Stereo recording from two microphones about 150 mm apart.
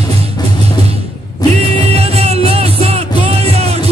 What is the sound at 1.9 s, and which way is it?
Music, 40° right (ahead or behind).